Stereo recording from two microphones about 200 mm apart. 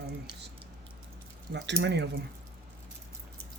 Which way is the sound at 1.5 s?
60° right (ahead or behind).